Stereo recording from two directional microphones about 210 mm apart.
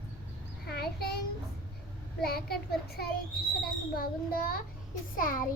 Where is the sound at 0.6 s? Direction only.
50° left (ahead or behind).